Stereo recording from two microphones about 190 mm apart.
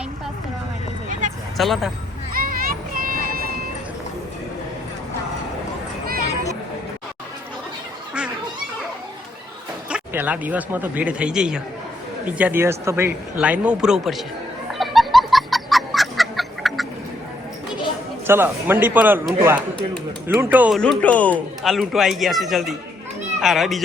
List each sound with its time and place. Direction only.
1.5 s speech: centre (ahead or behind)
2.3 s music: 50° right (ahead or behind)
9.9 s speech: 10° right (ahead or behind)
14.7 s chicken: centre (ahead or behind)
18.3 s speech: 10° right (ahead or behind)
20.7 s speech: 5° left (ahead or behind)